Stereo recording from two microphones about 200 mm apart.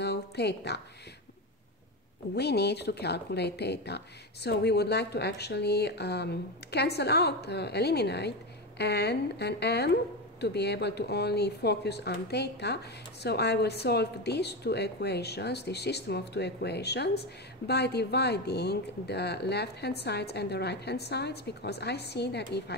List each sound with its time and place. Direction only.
0.0 s speech: 55° left (ahead or behind)
2.3 s speech: 55° left (ahead or behind)